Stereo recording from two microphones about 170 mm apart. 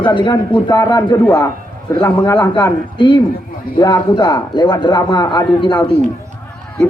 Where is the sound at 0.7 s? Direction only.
15° left (ahead or behind).